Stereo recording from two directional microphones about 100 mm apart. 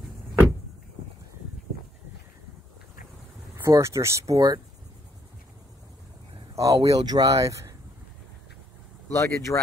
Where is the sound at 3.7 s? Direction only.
30° right (ahead or behind).